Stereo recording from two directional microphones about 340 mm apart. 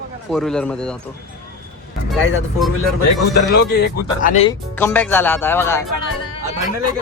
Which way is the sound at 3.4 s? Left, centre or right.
Left.